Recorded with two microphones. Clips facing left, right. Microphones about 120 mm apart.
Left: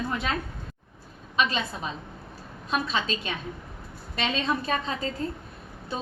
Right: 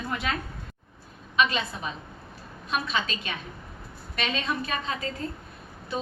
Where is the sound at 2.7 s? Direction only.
30° left (ahead or behind).